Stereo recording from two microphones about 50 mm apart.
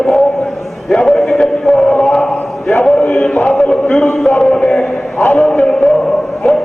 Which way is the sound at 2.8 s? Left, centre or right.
Left.